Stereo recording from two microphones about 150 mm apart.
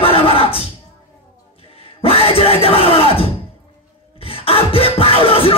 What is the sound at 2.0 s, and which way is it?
Music, 40° left (ahead or behind).